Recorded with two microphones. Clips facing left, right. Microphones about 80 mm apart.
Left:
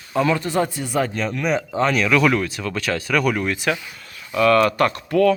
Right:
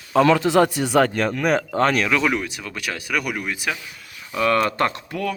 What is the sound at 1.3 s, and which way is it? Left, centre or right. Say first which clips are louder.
Speech: right 1 dB; right.